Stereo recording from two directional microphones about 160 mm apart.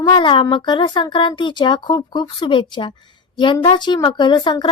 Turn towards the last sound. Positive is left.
turn(degrees=30)  # may be behind; listen again after turning